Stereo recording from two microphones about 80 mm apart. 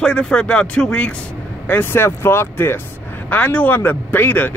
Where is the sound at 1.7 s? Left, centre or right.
Left.